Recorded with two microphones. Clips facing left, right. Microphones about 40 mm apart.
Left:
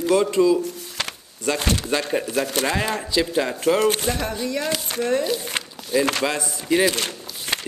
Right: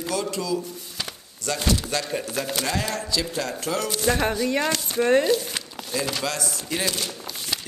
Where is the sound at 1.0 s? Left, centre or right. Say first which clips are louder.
Left 5 dB; left.